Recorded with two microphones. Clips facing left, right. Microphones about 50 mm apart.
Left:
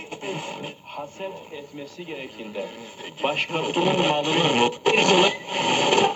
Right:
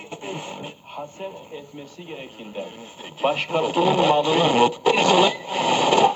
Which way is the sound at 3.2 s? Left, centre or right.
Left.